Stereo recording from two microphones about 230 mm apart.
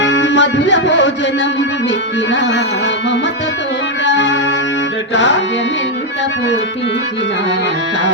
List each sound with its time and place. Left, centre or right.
0.0 s music: left